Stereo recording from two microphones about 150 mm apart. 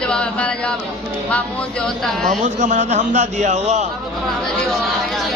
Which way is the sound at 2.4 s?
55° right (ahead or behind).